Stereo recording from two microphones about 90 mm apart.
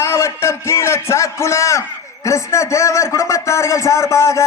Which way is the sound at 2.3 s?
35° left (ahead or behind).